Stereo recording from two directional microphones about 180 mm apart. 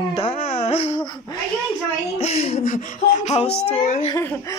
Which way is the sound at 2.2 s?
35° left (ahead or behind).